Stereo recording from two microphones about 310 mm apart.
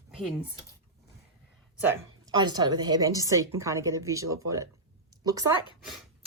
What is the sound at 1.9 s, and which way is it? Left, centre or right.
A woman's voice, centre.